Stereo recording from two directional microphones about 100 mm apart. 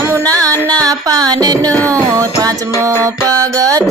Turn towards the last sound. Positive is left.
turn(degrees=-35)  # may be behind; listen again after turning